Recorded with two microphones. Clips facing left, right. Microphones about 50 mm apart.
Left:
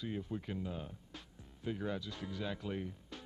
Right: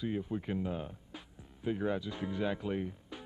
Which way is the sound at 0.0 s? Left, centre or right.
Centre.